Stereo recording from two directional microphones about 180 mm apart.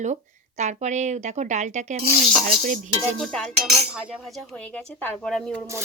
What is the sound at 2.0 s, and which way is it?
Speech, 50° right (ahead or behind).